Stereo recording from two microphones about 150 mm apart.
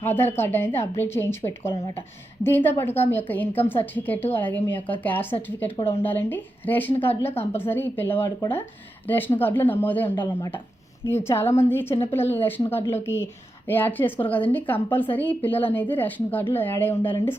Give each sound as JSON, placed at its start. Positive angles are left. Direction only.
{"t": 0.0, "sound": "a woman's voice", "side_deg": 15}
{"t": 2.4, "sound": "a woman's voice", "side_deg": 15}
{"t": 10.2, "sound": "speech", "side_deg": 30}
{"t": 11.1, "sound": "a woman's voice", "side_deg": 15}